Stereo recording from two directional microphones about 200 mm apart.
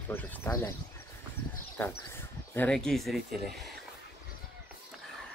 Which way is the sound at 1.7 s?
10° left (ahead or behind).